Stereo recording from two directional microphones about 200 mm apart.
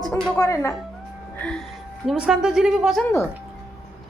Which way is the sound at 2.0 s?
5° right (ahead or behind).